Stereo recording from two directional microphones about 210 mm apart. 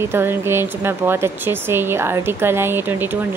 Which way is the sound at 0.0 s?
10° right (ahead or behind).